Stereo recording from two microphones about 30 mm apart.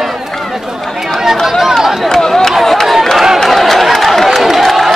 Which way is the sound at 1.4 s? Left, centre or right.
Centre.